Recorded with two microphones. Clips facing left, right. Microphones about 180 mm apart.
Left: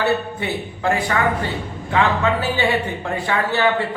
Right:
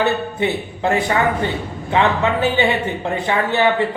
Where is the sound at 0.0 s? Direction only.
20° right (ahead or behind).